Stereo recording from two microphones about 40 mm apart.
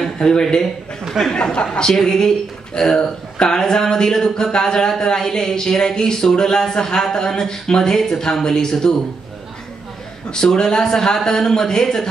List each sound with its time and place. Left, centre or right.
0.2 s a man's voice: left
10.3 s a man's voice: centre